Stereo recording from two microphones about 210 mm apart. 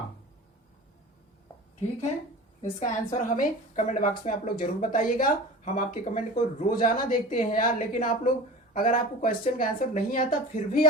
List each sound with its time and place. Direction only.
2.6 s a woman's voice: 35° left (ahead or behind)